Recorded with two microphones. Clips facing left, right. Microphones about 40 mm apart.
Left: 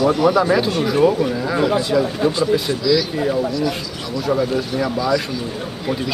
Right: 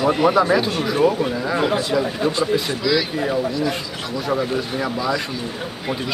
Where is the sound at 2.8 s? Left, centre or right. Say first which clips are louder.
Left 3 dB; right.